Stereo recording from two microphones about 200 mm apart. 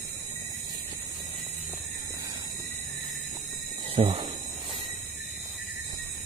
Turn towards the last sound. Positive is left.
turn(degrees=-30)  # may be behind; listen again after turning